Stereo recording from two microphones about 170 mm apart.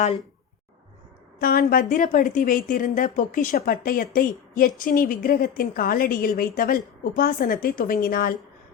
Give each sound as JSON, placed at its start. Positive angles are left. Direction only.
{"t": 1.4, "sound": "a woman's voice", "side_deg": 60}